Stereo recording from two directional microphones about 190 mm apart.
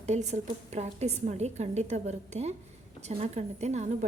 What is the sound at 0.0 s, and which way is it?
A woman's voice, 35° right (ahead or behind).